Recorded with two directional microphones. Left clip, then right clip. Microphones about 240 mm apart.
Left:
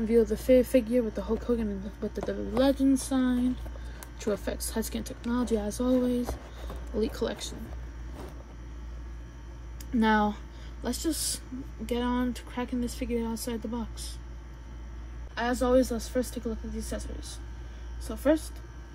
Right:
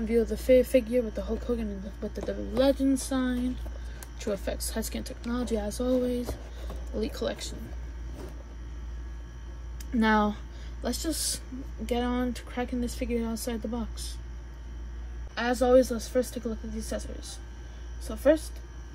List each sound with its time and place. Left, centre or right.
0.0 s speech: centre
9.9 s speech: centre
15.3 s speech: centre